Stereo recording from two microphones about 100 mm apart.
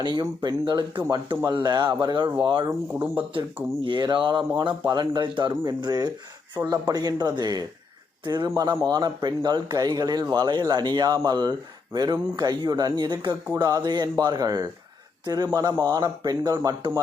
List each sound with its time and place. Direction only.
0.0 s speech: 45° right (ahead or behind)
2.9 s speech: 15° right (ahead or behind)
3.3 s speech: 55° right (ahead or behind); by 16.7 s 35° right (ahead or behind)